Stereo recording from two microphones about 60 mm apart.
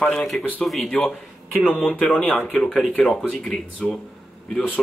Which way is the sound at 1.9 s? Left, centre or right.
Left.